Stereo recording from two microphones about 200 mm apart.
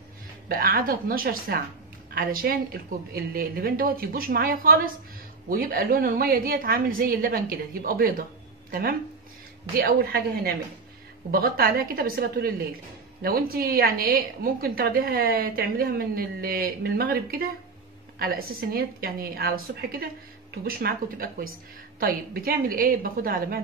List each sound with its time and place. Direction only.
0.5 s a woman's voice: 45° right (ahead or behind)
9.8 s a woman's voice: 50° right (ahead or behind)